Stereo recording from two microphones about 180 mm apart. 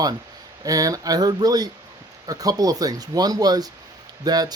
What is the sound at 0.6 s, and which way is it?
Speech, 20° right (ahead or behind).